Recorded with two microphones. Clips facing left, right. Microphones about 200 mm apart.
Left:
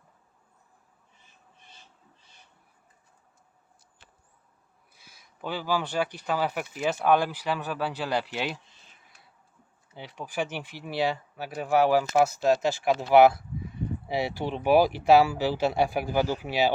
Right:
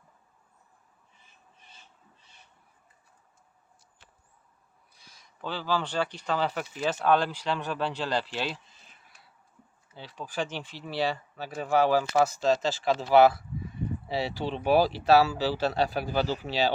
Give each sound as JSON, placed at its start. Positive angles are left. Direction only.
{"t": 4.9, "sound": "speech", "side_deg": 5}
{"t": 9.9, "sound": "speech", "side_deg": 15}